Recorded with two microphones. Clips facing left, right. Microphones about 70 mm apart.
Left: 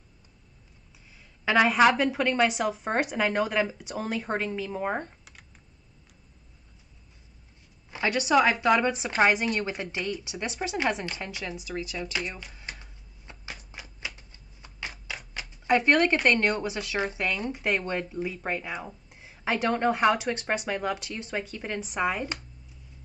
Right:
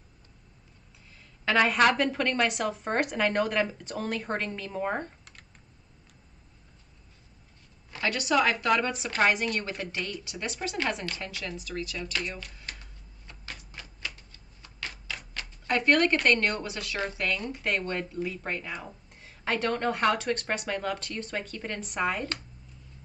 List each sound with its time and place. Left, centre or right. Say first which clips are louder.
1.1 s a woman's voice: left 2 dB; centre
7.9 s a sound: left 3 dB; centre
8.3 s a woman's voice: left 3 dB; centre
13.3 s cupboard open or close: left 3 dB; left
14.0 s typewriter: even; centre
15.5 s a sound: left 5 dB; centre
15.9 s a woman's voice: right 2 dB; centre
17.0 s speech: left 1 dB; centre
17.6 s a woman's voice: left 1 dB; centre